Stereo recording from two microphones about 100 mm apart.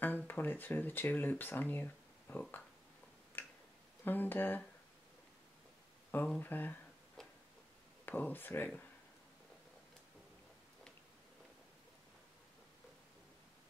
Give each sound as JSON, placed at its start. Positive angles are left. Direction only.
{"t": 0.3, "sound": "speech", "side_deg": 20}
{"t": 3.4, "sound": "finger snapping", "side_deg": 20}
{"t": 4.0, "sound": "speech", "side_deg": 20}
{"t": 6.1, "sound": "speech", "side_deg": 15}
{"t": 7.2, "sound": "tick-tock", "side_deg": 5}
{"t": 8.0, "sound": "speech", "side_deg": 20}